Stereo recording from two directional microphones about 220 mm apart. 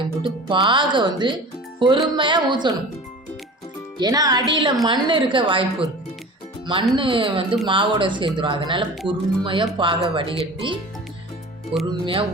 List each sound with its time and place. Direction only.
0.4 s speech: 20° right (ahead or behind)
3.9 s speech: 15° right (ahead or behind)